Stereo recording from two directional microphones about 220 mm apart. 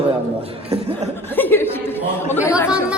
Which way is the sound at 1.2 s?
10° left (ahead or behind).